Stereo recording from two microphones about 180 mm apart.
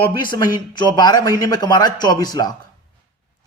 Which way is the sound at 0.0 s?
25° left (ahead or behind).